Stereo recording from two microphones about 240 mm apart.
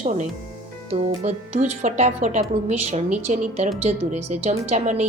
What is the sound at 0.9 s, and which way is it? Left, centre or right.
Speech, right.